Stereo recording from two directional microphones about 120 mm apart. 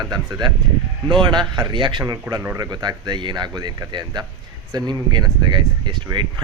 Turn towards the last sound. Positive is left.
turn(degrees=-40)  # may be behind; listen again after turning